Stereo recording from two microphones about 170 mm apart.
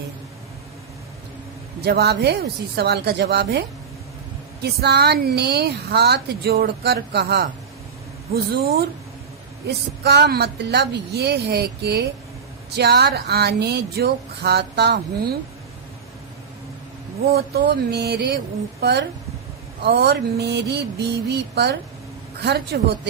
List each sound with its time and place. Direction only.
1.8 s speech: 70° right (ahead or behind)
4.6 s speech: 75° right (ahead or behind)
10.0 s speech: 75° right (ahead or behind)
17.2 s speech: 70° right (ahead or behind)